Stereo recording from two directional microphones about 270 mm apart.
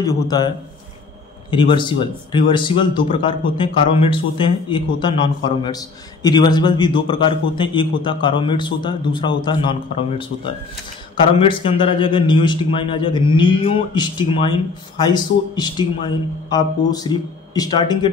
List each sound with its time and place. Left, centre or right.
0.0 s speech: centre
1.5 s speech: centre